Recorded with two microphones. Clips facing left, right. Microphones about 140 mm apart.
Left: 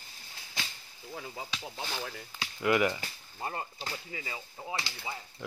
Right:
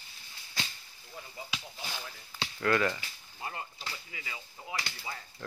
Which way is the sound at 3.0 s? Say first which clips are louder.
Left 4 dB; 40° left (ahead or behind).